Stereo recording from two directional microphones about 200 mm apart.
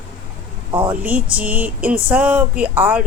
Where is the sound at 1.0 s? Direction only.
5° right (ahead or behind).